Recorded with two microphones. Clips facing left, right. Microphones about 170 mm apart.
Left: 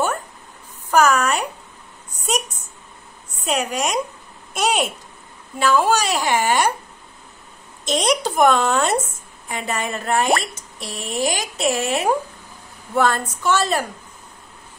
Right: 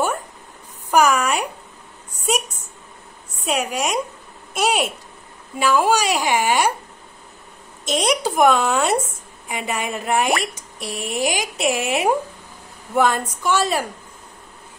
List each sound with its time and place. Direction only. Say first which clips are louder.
0.9 s speech: even; 10° right (ahead or behind)
3.4 s a woman's voice: even; 5° right (ahead or behind)
7.8 s speech: even; 5° right (ahead or behind)